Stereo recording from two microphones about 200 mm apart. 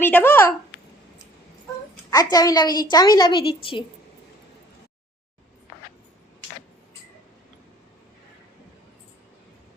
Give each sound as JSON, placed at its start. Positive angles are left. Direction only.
{"t": 0.0, "sound": "a woman's voice", "side_deg": 10}
{"t": 2.0, "sound": "a woman's voice", "side_deg": 20}